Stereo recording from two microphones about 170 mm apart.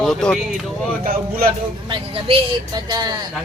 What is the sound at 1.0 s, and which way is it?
Speech, 60° right (ahead or behind).